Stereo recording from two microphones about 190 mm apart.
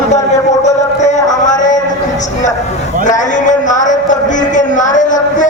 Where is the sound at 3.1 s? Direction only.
40° left (ahead or behind).